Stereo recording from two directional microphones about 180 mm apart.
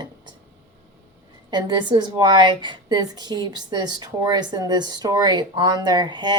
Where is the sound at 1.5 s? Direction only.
25° right (ahead or behind).